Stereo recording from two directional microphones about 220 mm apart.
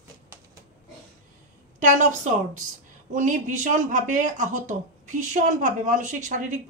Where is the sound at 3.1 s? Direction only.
35° right (ahead or behind).